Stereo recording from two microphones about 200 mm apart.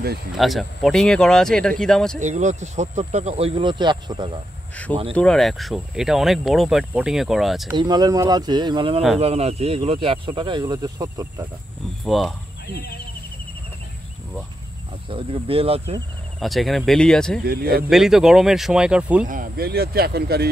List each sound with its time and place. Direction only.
0.4 s speech: centre (ahead or behind)
2.1 s speech: 35° right (ahead or behind)
4.8 s speech: 5° left (ahead or behind)
7.7 s speech: 20° right (ahead or behind)
12.0 s speech: centre (ahead or behind)
12.7 s speech: 50° left (ahead or behind)
15.0 s speech: 25° right (ahead or behind)
16.3 s speech: centre (ahead or behind)
17.5 s speech: 50° right (ahead or behind)
17.8 s speech: centre (ahead or behind)
19.2 s speech: 45° right (ahead or behind)